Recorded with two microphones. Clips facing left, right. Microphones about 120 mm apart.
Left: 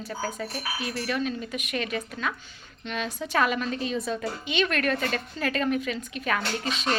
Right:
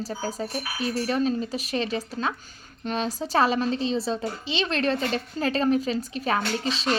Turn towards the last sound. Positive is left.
turn(degrees=-30)  # may be behind; listen again after turning